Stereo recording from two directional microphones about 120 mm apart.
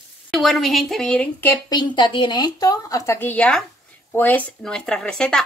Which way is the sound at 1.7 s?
40° left (ahead or behind).